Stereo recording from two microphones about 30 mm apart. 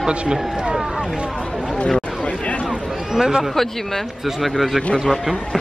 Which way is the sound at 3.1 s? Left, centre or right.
Centre.